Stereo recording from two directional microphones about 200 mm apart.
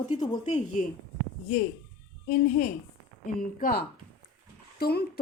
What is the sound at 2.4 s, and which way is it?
A woman's voice, 45° left (ahead or behind).